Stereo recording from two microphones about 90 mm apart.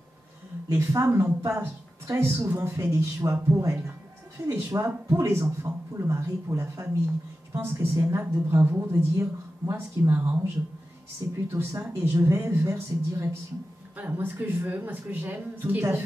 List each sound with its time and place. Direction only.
0.7 s speech: 30° right (ahead or behind)